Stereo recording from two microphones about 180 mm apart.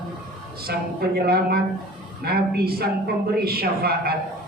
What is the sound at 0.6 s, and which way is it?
A man's voice, 60° right (ahead or behind).